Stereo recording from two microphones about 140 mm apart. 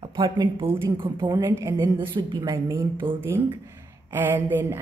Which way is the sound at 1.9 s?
35° right (ahead or behind).